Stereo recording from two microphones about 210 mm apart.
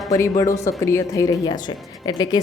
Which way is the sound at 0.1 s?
15° left (ahead or behind).